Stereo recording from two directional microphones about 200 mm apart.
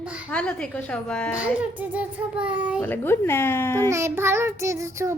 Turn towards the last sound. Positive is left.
turn(degrees=-15)  # may be behind; listen again after turning